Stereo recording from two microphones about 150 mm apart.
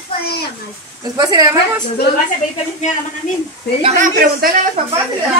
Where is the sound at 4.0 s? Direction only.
80° right.